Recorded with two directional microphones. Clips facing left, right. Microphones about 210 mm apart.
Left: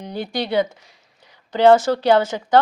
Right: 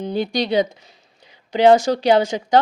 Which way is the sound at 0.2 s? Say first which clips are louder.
Right 1 dB; 15° right (ahead or behind).